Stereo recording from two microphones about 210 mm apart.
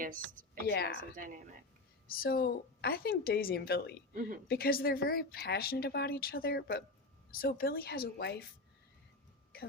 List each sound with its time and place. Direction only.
0.7 s a woman's voice: 50° left (ahead or behind)
2.0 s a woman's voice: 45° left (ahead or behind)
4.1 s a woman's voice: 40° right (ahead or behind)
4.4 s a woman's voice: 45° left (ahead or behind)